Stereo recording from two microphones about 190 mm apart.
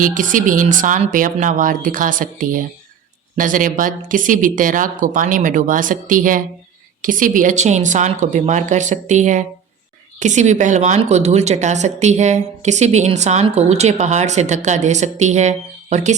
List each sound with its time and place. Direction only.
0.0 s a woman's voice: 45° right (ahead or behind)